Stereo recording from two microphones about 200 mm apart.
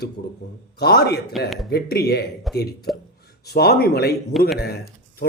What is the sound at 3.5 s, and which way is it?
A man's voice, 50° left (ahead or behind).